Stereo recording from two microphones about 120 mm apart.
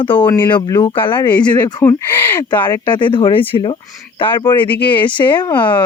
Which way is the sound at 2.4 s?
35° left (ahead or behind).